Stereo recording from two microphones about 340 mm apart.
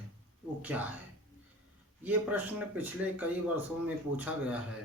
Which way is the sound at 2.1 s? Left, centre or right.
Centre.